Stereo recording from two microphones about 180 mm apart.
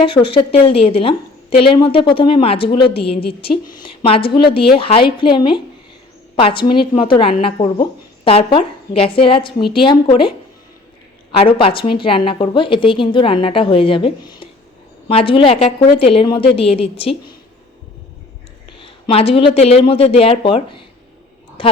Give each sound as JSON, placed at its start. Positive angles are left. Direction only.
{"t": 0.0, "sound": "a woman's voice", "side_deg": 30}
{"t": 9.6, "sound": "a woman's voice", "side_deg": 60}
{"t": 9.8, "sound": "a woman's voice", "side_deg": 25}
{"t": 18.8, "sound": "a woman's voice", "side_deg": 30}